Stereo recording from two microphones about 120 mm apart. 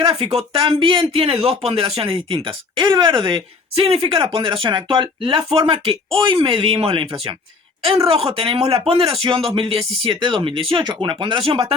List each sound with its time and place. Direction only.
0.0 s speech: 55° right (ahead or behind)